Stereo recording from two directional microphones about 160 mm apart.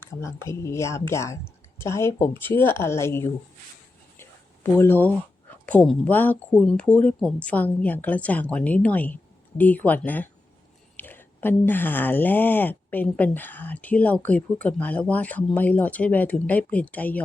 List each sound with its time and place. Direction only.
0.0 s speech: 15° left (ahead or behind)
4.2 s a sound: 15° left (ahead or behind)
5.6 s speech: 5° left (ahead or behind)